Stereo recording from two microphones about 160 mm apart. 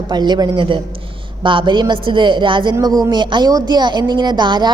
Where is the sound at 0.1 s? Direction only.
25° right (ahead or behind).